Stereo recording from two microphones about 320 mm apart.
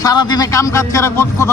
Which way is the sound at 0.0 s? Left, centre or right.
Centre.